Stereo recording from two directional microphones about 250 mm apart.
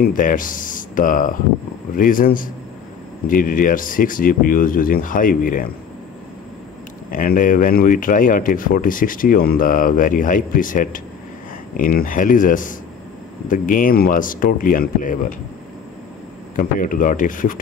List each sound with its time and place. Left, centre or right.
0.0 s speech: left
7.1 s speech: left
16.5 s speech: left